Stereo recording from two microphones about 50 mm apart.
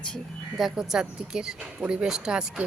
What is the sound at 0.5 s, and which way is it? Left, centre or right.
A woman's voice, centre.